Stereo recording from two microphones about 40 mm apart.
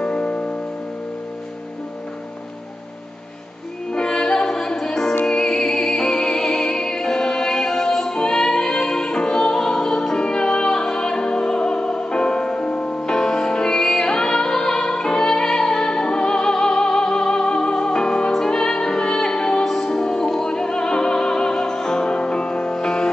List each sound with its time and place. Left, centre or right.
0.0 s music: left
3.9 s music: centre
19.6 s music: centre
19.9 s music: centre